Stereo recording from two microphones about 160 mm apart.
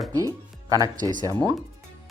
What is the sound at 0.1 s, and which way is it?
Music, 20° right (ahead or behind).